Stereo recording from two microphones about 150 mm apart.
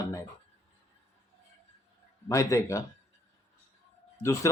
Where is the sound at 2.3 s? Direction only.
20° left (ahead or behind).